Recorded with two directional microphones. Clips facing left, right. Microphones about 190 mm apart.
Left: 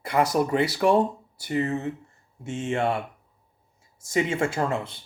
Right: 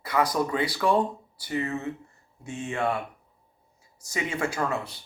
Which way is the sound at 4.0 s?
25° left (ahead or behind).